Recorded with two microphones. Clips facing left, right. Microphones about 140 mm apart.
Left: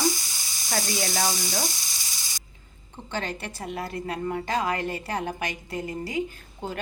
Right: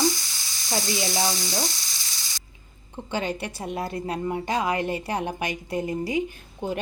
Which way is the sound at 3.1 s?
15° right (ahead or behind).